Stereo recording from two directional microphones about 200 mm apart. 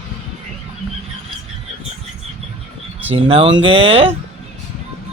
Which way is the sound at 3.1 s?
25° right (ahead or behind).